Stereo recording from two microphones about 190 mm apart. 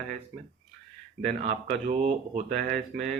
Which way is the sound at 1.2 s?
40° right (ahead or behind).